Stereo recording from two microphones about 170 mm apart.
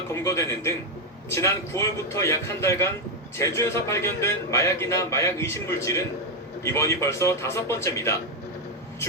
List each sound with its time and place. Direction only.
0.1 s a man's voice: 15° left (ahead or behind)